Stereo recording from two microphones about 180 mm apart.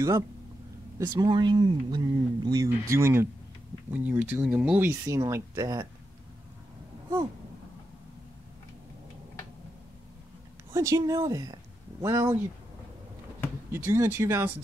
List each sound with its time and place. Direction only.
0.9 s speech: 25° right (ahead or behind)
10.7 s speech: 15° right (ahead or behind)
13.7 s speech: 10° right (ahead or behind)